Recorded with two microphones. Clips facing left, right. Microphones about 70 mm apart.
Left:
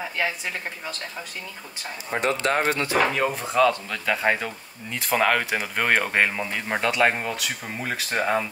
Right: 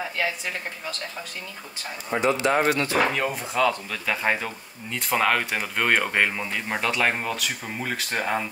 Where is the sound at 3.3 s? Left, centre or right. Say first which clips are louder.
Left 3 dB; centre.